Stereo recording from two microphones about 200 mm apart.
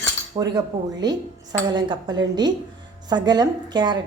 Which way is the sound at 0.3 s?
20° right (ahead or behind).